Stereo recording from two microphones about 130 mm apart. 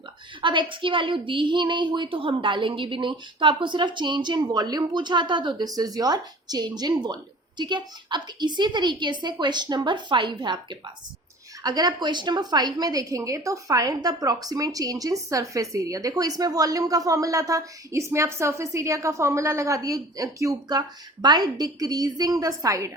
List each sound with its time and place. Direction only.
0.4 s a woman's voice: 40° right (ahead or behind)